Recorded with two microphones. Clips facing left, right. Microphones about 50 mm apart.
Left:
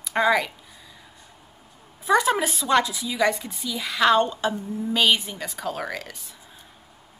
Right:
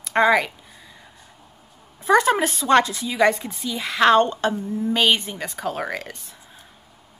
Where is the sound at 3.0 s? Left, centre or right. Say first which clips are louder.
Right 4 dB; centre.